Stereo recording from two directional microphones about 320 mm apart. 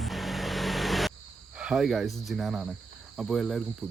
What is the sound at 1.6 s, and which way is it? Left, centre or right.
Speech, centre.